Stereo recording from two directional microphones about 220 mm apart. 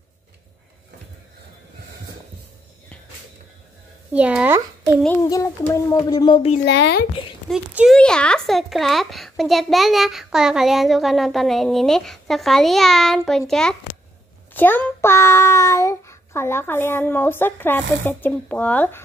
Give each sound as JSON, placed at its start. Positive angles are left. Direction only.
{"t": 4.1, "sound": "speech", "side_deg": -5}
{"t": 5.0, "sound": "a child's voice", "side_deg": 10}
{"t": 6.6, "sound": "speech", "side_deg": 50}
{"t": 7.4, "sound": "a child's voice", "side_deg": -5}